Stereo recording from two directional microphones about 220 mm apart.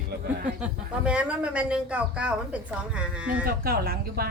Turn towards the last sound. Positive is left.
turn(degrees=-45)  # may be behind; listen again after turning